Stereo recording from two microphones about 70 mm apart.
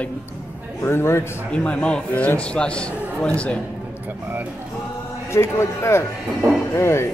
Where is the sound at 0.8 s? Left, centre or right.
Left.